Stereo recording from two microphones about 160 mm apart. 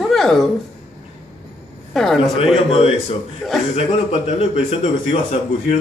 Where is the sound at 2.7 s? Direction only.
40° left (ahead or behind).